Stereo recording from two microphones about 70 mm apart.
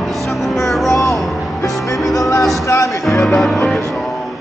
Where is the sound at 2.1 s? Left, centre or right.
Left.